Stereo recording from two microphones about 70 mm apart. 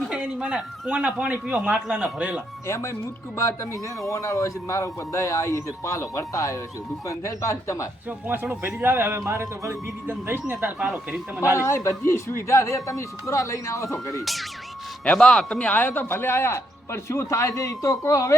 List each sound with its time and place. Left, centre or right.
0.1 s speech: centre
2.6 s speech: left
8.3 s speech: right
10.1 s speech: right
10.8 s speech: centre
11.6 s speech: left
15.0 s speech: centre; by 18.3 s left